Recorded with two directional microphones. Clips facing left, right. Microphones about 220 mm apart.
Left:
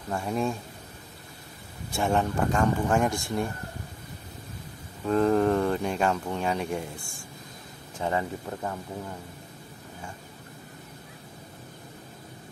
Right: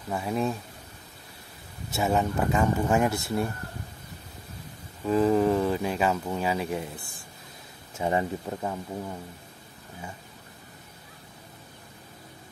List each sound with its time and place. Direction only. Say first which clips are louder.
0.1 s speech: even; 5° right (ahead or behind)
1.9 s speech: even; 5° right (ahead or behind)
5.0 s speech: even; 5° right (ahead or behind)
8.0 s speech: right 2 dB; 15° right (ahead or behind)